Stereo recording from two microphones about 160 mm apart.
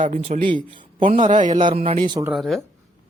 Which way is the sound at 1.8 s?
30° right (ahead or behind).